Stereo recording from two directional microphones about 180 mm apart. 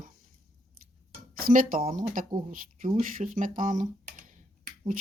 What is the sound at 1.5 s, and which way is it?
Speech, 50° right (ahead or behind).